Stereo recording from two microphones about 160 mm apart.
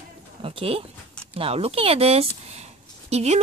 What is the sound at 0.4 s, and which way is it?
A woman's voice, 35° right (ahead or behind).